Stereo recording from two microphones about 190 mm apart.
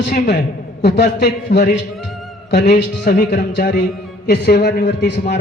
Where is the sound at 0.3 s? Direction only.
60° left (ahead or behind).